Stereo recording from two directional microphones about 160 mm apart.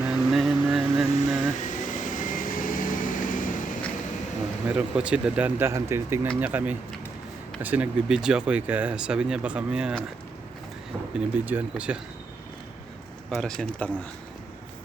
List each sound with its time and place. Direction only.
0.0 s vehicle: centre (ahead or behind)
1.6 s vehicle: 50° left (ahead or behind)
4.7 s speech: 5° right (ahead or behind)
11.1 s speech: 10° right (ahead or behind)
13.3 s a man's voice: 5° left (ahead or behind)